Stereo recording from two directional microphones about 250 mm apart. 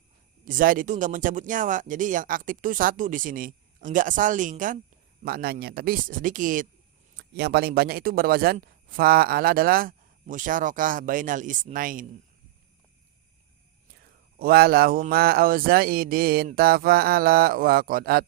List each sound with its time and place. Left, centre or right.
0.4 s speech: right
13.9 s speech: right